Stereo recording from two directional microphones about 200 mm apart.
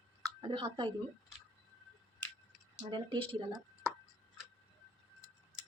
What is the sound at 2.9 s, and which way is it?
Speech, 25° right (ahead or behind).